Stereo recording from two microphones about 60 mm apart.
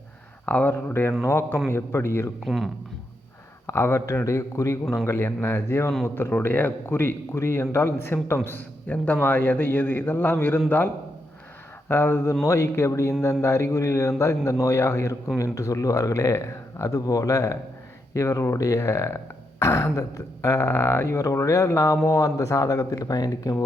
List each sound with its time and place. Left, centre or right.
0.4 s a man's voice: left
2.4 s speech: centre
3.7 s a man's voice: left
5.0 s a man's voice: left
6.3 s a man's voice: left
11.9 s a man's voice: left
13.4 s burping: left
22.1 s speech: left